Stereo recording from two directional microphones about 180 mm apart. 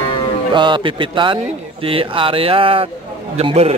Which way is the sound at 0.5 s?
25° right (ahead or behind).